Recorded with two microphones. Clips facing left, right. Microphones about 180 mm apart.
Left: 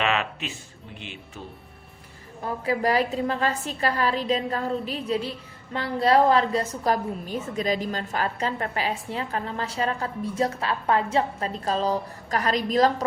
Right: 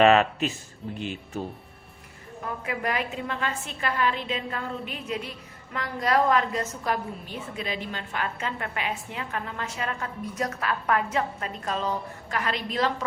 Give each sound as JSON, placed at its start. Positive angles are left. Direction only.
{"t": 0.0, "sound": "speech", "side_deg": -40}
{"t": 2.4, "sound": "a woman's voice", "side_deg": 35}